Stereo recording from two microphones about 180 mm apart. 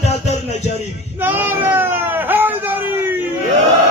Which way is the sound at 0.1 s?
40° left (ahead or behind).